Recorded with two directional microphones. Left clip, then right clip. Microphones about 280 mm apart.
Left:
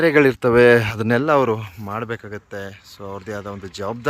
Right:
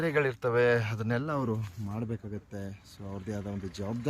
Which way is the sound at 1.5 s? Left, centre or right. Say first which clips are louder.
Left 14 dB; left.